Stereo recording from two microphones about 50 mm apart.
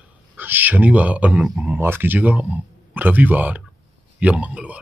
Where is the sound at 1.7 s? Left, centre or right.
Right.